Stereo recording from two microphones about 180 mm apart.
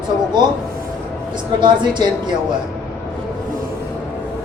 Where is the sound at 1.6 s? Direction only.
25° right (ahead or behind).